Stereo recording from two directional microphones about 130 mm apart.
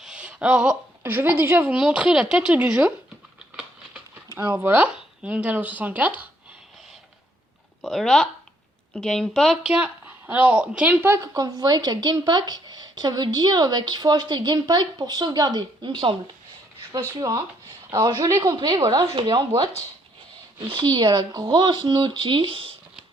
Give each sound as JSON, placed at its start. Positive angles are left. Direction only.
{"t": 0.0, "sound": "a sound", "side_deg": -10}
{"t": 1.1, "sound": "speech", "side_deg": -15}
{"t": 4.4, "sound": "speech", "side_deg": -20}
{"t": 7.8, "sound": "speech", "side_deg": 0}
{"t": 20.7, "sound": "speech", "side_deg": -35}